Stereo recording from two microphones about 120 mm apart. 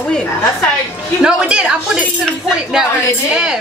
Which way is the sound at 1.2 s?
5° right (ahead or behind).